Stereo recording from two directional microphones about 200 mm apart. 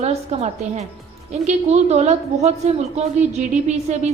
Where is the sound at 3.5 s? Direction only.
35° right (ahead or behind).